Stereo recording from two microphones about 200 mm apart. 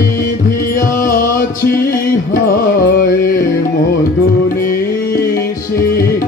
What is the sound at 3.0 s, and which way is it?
Music, 45° left (ahead or behind).